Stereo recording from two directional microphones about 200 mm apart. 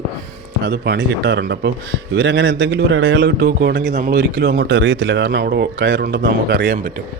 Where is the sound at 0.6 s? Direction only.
60° right (ahead or behind).